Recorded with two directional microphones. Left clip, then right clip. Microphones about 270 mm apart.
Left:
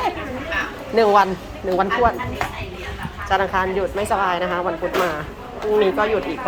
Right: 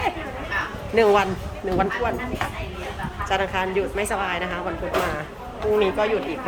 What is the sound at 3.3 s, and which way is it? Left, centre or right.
Speech, centre.